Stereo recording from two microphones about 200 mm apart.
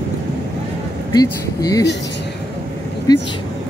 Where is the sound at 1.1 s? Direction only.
20° left (ahead or behind).